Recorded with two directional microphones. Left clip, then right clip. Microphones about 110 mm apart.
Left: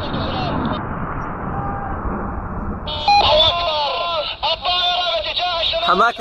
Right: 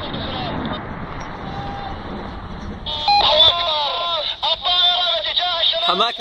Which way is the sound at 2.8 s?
50° left (ahead or behind).